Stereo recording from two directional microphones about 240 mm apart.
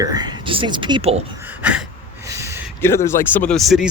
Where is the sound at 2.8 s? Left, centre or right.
Centre.